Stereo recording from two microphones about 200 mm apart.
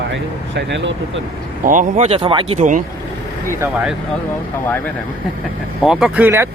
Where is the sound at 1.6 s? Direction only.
40° right (ahead or behind); by 2.6 s 25° right (ahead or behind).